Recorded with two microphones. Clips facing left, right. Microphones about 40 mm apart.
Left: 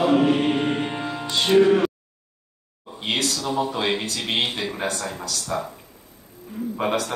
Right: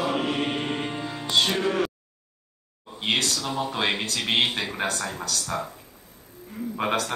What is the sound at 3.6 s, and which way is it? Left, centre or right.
Speech, right.